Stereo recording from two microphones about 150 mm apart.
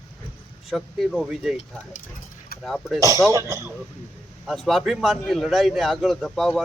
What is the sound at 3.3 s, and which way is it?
Speech, 20° right (ahead or behind).